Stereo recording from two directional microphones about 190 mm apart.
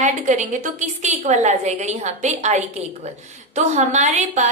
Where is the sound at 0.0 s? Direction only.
40° right (ahead or behind).